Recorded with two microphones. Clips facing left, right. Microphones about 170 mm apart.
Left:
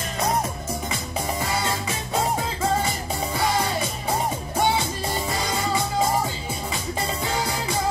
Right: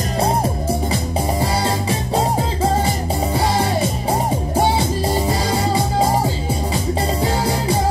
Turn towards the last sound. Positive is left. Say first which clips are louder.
# right 5 dB
turn(degrees=-35)  # may be behind; listen again after turning